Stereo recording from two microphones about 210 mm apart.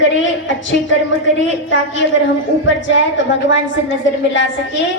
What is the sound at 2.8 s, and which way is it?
A woman's voice, 60° left (ahead or behind).